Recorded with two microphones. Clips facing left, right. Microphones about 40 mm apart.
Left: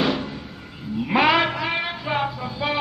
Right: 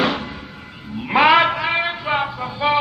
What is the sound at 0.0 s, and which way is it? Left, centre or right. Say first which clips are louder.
Music: right 2 dB; right.